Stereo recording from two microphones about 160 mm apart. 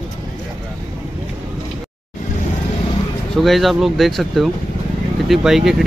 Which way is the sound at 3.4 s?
Centre (ahead or behind).